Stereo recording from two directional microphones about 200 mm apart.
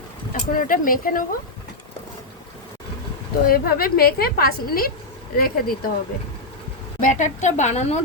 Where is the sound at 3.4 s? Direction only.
45° left (ahead or behind).